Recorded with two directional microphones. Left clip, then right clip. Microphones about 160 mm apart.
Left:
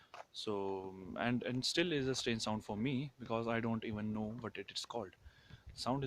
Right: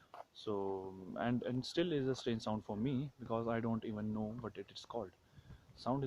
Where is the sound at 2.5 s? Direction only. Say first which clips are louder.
Even; 5° left (ahead or behind).